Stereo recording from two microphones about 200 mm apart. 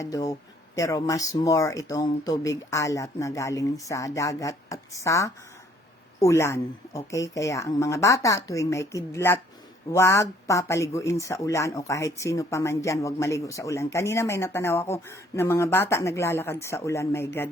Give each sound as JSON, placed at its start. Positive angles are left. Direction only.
{"t": 0.0, "sound": "speech", "side_deg": 15}